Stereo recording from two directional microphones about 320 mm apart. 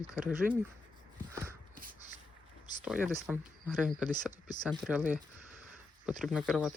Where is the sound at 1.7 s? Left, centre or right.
Right.